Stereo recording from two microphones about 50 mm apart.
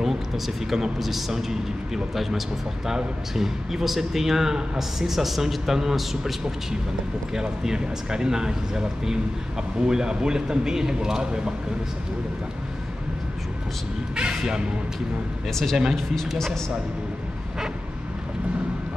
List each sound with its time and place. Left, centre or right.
0.7 s a man's voice: centre
7.3 s speech: centre
14.1 s speech: centre
15.5 s speech: centre